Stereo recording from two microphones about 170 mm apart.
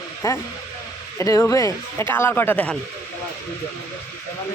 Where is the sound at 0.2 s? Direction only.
15° left (ahead or behind).